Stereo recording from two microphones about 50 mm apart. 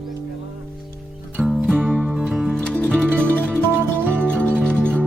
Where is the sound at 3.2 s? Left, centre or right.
Left.